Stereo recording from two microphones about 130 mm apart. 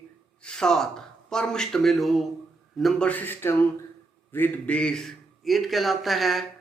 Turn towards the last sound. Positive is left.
turn(degrees=0)  # may be behind; listen again after turning